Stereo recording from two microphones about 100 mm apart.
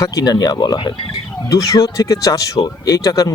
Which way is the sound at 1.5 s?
35° left (ahead or behind).